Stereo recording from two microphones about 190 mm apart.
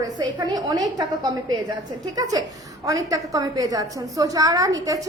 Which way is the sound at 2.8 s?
20° right (ahead or behind).